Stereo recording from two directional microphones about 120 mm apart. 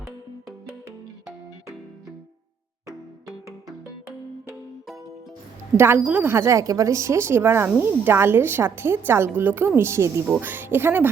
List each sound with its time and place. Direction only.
5.7 s speech: 20° right (ahead or behind)